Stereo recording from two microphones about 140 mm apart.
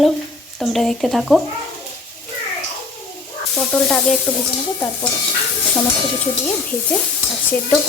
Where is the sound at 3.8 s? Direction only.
5° left (ahead or behind).